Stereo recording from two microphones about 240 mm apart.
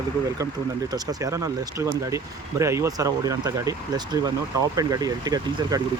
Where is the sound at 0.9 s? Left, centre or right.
Centre.